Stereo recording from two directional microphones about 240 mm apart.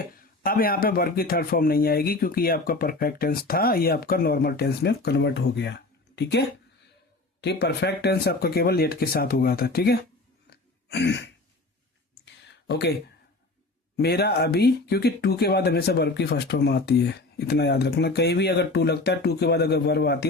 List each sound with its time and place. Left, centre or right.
0.0 s a man's voice: left
7.4 s a man's voice: left
10.5 s throat clearing: left
12.2 s a sound: left
13.9 s speech: left